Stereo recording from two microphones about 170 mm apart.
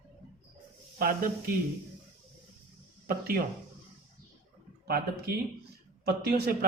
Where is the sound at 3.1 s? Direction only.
65° right (ahead or behind).